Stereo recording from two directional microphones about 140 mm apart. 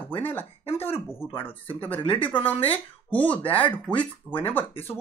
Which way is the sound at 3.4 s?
40° left (ahead or behind).